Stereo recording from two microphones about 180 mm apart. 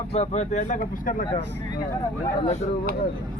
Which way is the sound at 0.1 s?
40° left (ahead or behind).